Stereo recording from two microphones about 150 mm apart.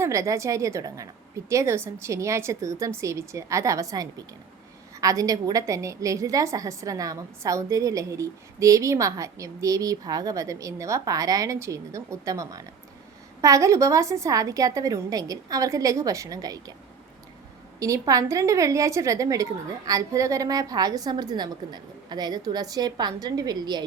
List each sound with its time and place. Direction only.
0.0 s a woman's voice: 20° right (ahead or behind)
17.7 s a woman's voice: 20° right (ahead or behind)